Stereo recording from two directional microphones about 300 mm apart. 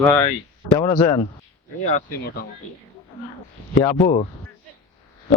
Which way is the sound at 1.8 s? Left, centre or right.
Left.